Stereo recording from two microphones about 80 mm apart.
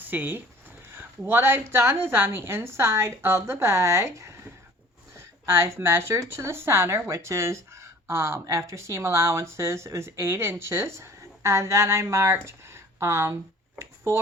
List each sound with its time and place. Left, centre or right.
0.0 s a woman's voice: right